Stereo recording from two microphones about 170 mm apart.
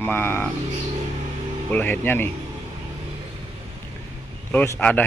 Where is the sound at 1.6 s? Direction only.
10° left (ahead or behind).